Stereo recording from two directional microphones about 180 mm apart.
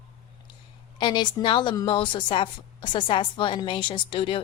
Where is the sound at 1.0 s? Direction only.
25° left (ahead or behind).